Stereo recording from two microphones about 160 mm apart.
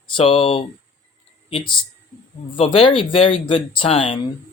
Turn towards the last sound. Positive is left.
turn(degrees=35)  # may be behind; listen again after turning